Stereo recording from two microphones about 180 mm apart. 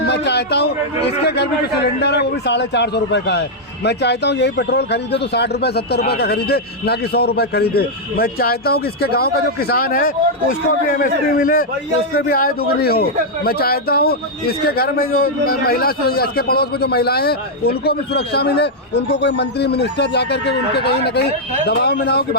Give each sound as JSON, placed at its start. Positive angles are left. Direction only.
{"t": 0.0, "sound": "a man's voice", "side_deg": 70}